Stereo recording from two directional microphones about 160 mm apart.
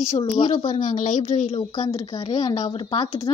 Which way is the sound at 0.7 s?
50° left (ahead or behind).